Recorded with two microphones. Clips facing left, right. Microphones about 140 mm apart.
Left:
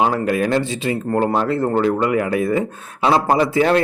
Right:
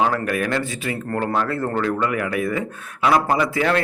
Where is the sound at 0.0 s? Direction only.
25° left (ahead or behind).